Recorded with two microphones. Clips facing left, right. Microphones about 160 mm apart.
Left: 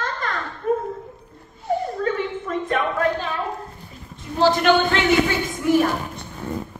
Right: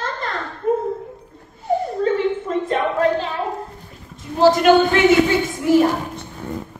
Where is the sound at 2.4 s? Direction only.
25° right (ahead or behind).